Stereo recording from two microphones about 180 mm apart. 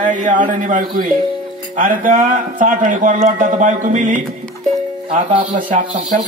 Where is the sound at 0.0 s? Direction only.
45° right (ahead or behind).